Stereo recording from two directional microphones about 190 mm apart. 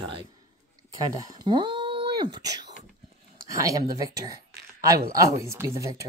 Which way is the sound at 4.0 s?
20° right (ahead or behind).